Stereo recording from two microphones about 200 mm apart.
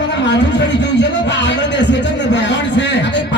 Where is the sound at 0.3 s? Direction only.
60° left (ahead or behind).